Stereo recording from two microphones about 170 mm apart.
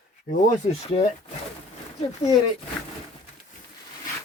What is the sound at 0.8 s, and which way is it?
Speech, 35° left (ahead or behind).